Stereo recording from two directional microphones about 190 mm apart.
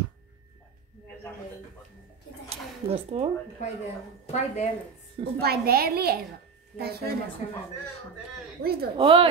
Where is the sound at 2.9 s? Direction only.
30° right (ahead or behind).